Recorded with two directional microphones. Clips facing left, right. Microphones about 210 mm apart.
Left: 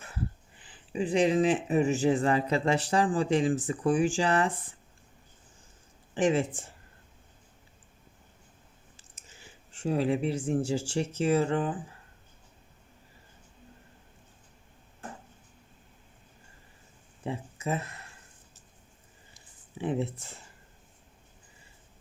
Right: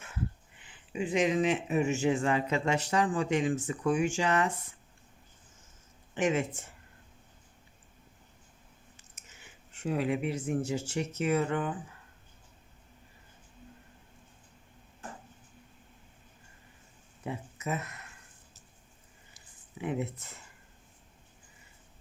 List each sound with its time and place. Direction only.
0.6 s speech: 35° left (ahead or behind)
6.1 s speech: 30° left (ahead or behind)
9.0 s speech: 30° left (ahead or behind)
17.2 s a sound: 30° left (ahead or behind)
19.8 s speech: 30° left (ahead or behind)